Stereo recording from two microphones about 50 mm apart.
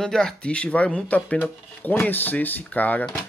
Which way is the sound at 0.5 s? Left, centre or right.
Left.